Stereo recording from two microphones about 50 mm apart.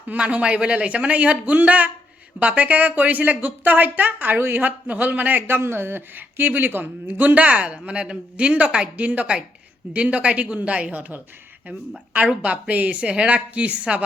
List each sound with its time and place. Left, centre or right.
0.1 s speech: right
4.6 s speech: right
7.2 s speech: right
12.1 s speech: right